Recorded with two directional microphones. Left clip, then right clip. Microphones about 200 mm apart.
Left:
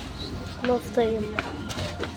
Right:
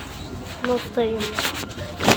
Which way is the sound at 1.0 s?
Centre (ahead or behind).